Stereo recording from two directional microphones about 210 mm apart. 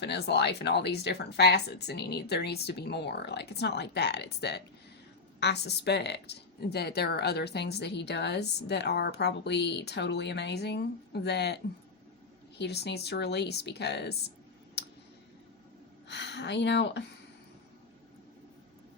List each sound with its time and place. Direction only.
0.0 s a woman's voice: 55° left (ahead or behind)
14.8 s a sound: 50° left (ahead or behind)
16.0 s speech: 55° left (ahead or behind)